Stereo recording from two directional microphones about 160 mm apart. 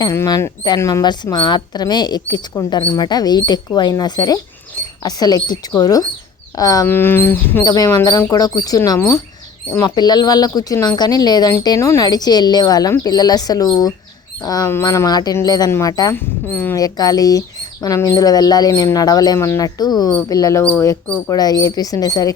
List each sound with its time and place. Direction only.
0.0 s speech: 20° left (ahead or behind)
16.7 s speech: 25° left (ahead or behind)